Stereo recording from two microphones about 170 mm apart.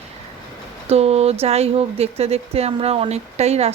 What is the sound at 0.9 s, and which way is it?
Speech, 35° right (ahead or behind).